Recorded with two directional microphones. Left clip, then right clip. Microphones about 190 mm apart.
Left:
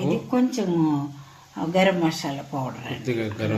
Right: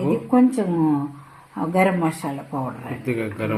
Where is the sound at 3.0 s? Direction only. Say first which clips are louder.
Right 2 dB; 5° right (ahead or behind).